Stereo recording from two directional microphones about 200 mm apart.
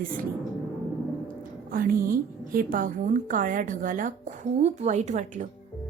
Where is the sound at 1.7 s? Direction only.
45° right (ahead or behind).